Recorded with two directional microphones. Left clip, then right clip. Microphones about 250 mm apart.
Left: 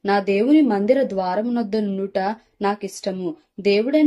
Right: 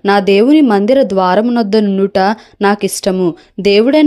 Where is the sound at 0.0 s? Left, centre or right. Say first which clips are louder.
Right 10 dB; right.